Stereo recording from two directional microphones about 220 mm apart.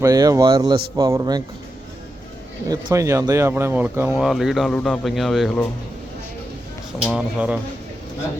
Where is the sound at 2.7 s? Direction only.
15° right (ahead or behind); by 5.6 s centre (ahead or behind).